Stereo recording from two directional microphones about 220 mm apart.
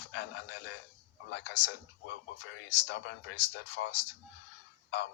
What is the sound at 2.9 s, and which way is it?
Speech, 55° left (ahead or behind).